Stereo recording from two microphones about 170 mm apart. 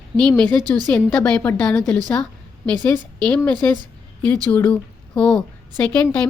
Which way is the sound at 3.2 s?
5° left (ahead or behind).